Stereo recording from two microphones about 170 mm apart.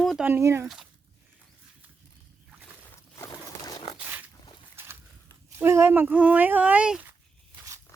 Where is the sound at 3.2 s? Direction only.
20° left (ahead or behind).